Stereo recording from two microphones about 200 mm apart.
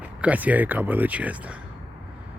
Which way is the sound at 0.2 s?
5° right (ahead or behind).